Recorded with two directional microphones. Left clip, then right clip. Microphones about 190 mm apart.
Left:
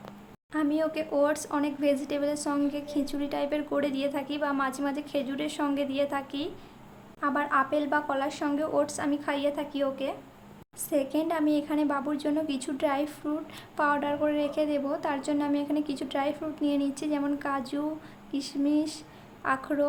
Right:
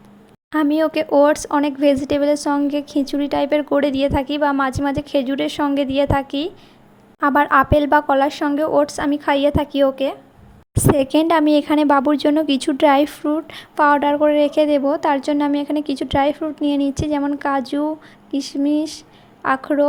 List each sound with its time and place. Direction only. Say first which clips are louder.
0.5 s a woman's voice: right 11 dB; 40° right (ahead or behind)